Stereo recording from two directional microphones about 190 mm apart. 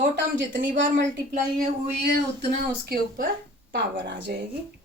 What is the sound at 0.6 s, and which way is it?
Speech, 45° right (ahead or behind).